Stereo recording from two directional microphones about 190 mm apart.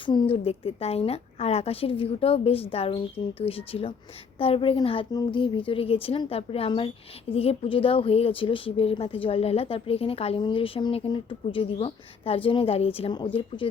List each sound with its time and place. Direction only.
0.0 s a woman's voice: 25° left (ahead or behind)